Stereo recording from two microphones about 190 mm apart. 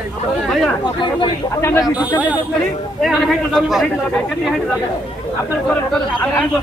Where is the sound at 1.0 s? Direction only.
25° left (ahead or behind).